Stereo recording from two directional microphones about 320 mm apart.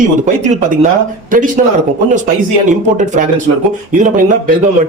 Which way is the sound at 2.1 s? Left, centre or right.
Right.